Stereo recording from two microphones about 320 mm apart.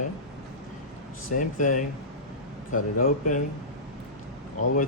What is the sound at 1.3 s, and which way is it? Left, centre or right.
Speech, left.